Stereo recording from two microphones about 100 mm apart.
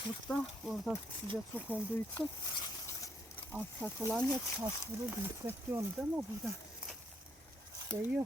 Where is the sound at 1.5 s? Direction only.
15° right (ahead or behind).